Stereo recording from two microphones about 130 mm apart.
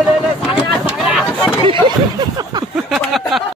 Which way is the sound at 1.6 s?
40° right (ahead or behind).